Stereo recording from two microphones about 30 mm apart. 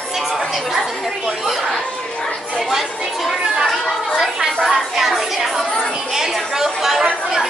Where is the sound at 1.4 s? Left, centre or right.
Centre.